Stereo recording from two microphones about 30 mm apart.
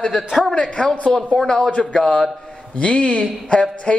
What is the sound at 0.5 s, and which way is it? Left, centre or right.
A man's voice, left.